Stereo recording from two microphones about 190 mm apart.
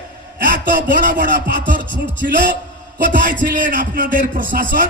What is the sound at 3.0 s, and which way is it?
Speech, 45° right (ahead or behind).